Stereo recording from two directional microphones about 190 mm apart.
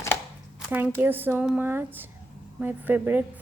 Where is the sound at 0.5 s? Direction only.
10° right (ahead or behind).